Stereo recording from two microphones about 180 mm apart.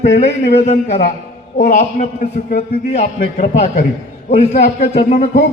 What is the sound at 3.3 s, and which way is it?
A man's voice, 40° left (ahead or behind).